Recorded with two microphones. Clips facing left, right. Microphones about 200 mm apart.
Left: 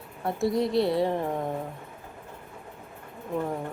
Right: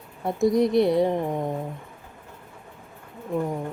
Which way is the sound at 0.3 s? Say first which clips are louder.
Right 5 dB; 20° right (ahead or behind).